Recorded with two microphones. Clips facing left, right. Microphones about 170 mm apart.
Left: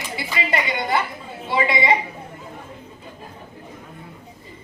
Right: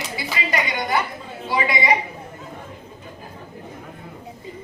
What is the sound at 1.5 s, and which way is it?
Speech, 25° left (ahead or behind).